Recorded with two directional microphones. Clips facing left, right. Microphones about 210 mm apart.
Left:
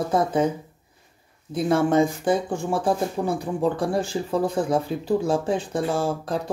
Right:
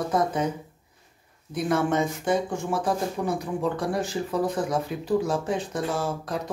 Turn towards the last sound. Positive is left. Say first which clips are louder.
# left 4 dB
turn(degrees=30)  # may be behind; listen again after turning